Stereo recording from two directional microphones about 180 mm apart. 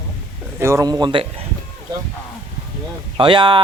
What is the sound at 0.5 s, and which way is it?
Speech, 15° right (ahead or behind).